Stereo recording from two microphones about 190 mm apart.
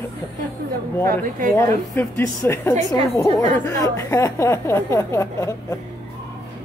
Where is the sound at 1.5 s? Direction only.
10° left (ahead or behind).